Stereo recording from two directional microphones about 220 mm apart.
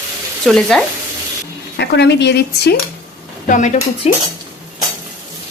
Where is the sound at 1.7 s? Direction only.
50° left (ahead or behind).